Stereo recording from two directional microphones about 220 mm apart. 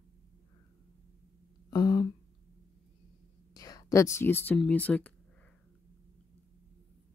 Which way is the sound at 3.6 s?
15° left (ahead or behind).